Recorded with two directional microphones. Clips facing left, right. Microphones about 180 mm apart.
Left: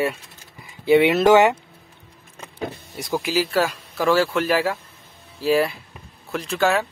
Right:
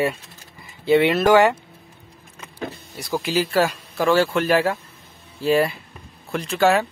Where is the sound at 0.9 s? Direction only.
20° left (ahead or behind).